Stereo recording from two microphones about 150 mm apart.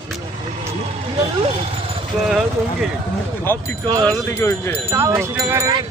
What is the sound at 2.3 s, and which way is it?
Speech, 5° right (ahead or behind).